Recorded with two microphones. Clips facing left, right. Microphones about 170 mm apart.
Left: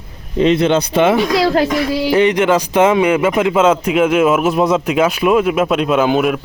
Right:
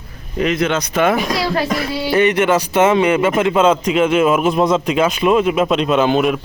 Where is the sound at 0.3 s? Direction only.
30° left (ahead or behind).